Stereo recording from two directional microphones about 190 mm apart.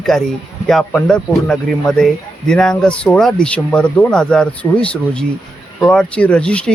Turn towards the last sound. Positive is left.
turn(degrees=5)  # may be behind; listen again after turning